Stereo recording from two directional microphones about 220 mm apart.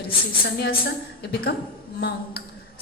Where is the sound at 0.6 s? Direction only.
45° left (ahead or behind).